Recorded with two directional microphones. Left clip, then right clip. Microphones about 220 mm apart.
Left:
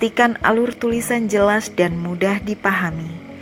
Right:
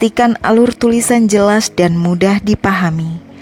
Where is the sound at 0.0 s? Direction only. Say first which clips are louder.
Right 3 dB; 50° right (ahead or behind).